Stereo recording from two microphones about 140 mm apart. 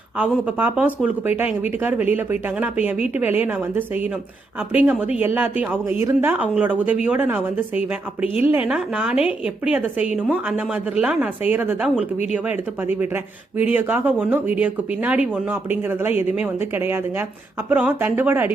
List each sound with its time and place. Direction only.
0.2 s speech: 10° right (ahead or behind)